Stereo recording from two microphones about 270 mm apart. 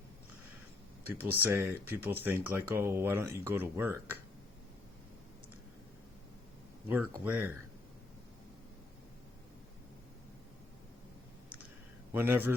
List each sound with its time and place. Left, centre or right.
1.0 s speech: centre
6.8 s speech: centre
12.1 s speech: centre